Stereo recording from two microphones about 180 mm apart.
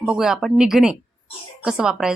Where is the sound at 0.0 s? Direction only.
5° right (ahead or behind).